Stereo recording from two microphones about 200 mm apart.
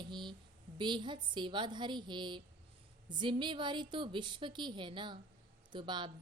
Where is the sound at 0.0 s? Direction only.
25° right (ahead or behind).